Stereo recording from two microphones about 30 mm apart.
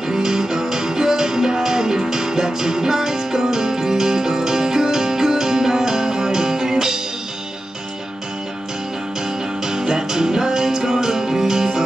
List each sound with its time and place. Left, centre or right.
0.1 s music: centre
9.7 s music: right